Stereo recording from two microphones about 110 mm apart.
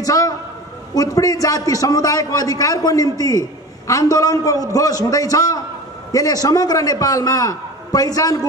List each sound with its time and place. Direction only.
0.0 s a man's voice: 30° left (ahead or behind)